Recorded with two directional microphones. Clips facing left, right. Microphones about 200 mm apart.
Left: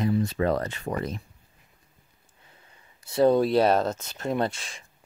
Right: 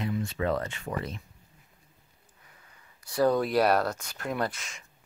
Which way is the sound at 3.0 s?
25° left (ahead or behind).